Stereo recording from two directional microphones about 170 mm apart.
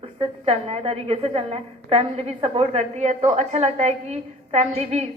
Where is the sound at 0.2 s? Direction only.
35° right (ahead or behind).